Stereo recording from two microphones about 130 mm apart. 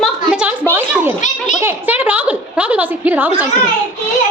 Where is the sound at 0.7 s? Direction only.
15° right (ahead or behind).